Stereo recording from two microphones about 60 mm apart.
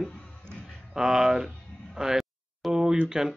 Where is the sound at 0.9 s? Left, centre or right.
Centre.